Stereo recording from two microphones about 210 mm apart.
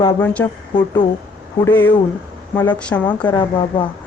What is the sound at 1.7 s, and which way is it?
A man's voice, 10° left (ahead or behind).